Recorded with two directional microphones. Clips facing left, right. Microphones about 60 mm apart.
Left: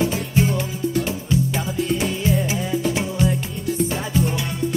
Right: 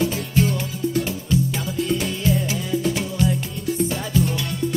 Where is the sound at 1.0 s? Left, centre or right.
Left.